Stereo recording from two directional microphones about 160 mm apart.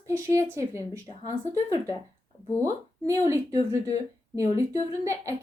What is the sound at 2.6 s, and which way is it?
A woman's voice, 20° right (ahead or behind).